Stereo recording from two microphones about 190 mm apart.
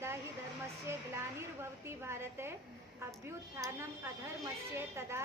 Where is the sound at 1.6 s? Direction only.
15° right (ahead or behind).